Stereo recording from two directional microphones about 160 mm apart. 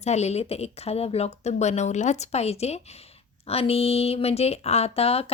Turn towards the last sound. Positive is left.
turn(degrees=40)  # may be behind; listen again after turning